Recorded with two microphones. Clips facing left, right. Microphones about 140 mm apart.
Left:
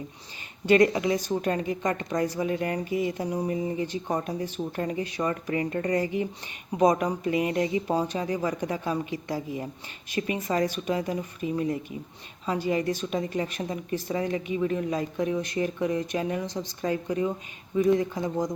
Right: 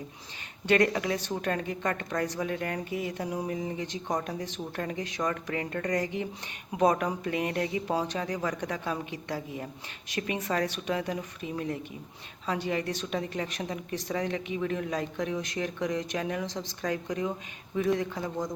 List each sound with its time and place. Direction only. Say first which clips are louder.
0.6 s a woman's voice: left 4 dB; 10° left (ahead or behind)
18.2 s speech: left 5 dB; 20° left (ahead or behind)